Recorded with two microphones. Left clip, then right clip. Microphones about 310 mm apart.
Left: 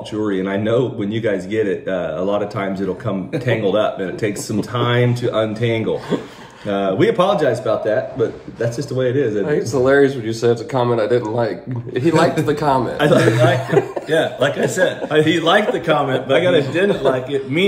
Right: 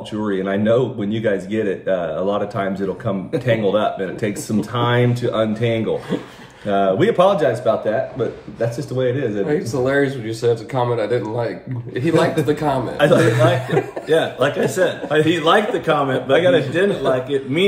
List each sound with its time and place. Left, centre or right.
0.2 s speech: centre
12.9 s speech: centre
14.0 s a man's voice: centre